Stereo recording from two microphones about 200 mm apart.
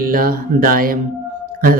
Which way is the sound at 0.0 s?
45° right (ahead or behind).